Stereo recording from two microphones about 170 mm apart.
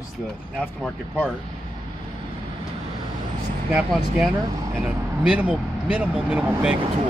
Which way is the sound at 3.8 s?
5° right (ahead or behind).